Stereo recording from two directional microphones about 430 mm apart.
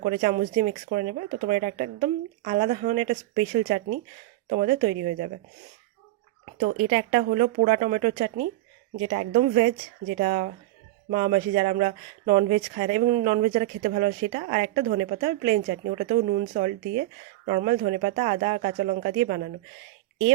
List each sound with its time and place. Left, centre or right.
0.2 s speech: centre
6.6 s speech: centre